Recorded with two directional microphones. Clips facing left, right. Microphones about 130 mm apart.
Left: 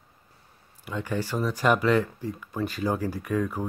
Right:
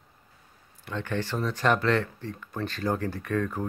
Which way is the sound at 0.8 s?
10° left (ahead or behind).